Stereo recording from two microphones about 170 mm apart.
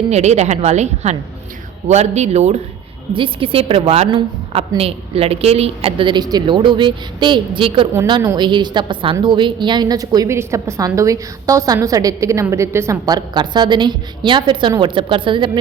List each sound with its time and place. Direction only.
0.1 s a woman's voice: 40° right (ahead or behind)